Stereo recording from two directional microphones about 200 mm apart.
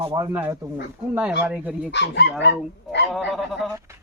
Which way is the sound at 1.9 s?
60° left (ahead or behind).